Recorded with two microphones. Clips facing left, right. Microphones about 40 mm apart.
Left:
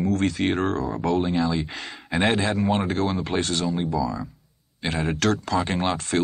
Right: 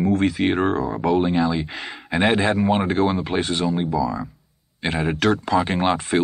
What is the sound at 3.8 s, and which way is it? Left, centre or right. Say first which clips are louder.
Speech: right 3 dB; centre.